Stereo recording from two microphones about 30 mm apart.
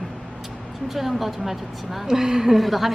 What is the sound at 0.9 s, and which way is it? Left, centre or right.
Speech, centre.